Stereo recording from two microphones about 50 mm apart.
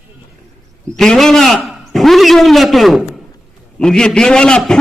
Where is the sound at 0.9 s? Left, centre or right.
Centre.